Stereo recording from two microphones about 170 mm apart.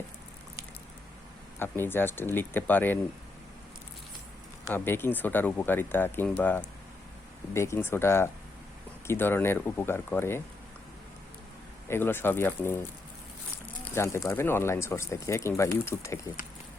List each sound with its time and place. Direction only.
1.5 s speech: 15° left (ahead or behind)
4.7 s speech: 15° left (ahead or behind)
11.9 s speech: 15° left (ahead or behind)
13.9 s speech: 15° left (ahead or behind)